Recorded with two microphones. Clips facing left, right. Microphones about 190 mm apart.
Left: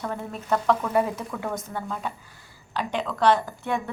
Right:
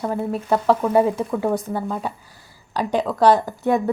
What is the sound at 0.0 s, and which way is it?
A woman's voice, 30° right (ahead or behind).